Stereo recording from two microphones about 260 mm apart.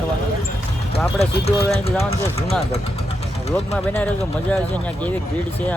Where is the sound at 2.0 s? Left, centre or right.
Left.